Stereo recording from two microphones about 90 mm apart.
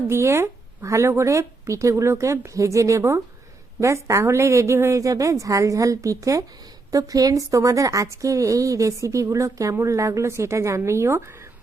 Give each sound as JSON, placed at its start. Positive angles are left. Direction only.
{"t": 0.1, "sound": "speech", "side_deg": -30}